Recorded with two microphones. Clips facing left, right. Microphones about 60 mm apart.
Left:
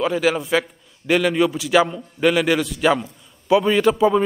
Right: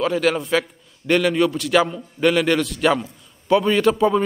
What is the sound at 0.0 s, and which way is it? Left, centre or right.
A man's voice, centre.